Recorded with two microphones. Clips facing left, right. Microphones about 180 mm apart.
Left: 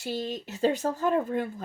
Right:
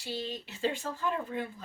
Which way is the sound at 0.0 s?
45° left (ahead or behind).